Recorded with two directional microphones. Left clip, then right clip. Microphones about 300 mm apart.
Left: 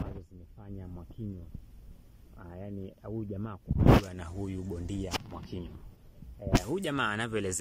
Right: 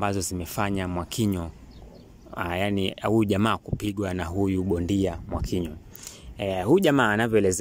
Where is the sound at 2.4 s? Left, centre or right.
Right; by 7.6 s centre.